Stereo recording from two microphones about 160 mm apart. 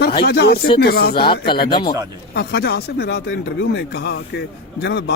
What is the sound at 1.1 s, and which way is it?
Speech, 30° left (ahead or behind).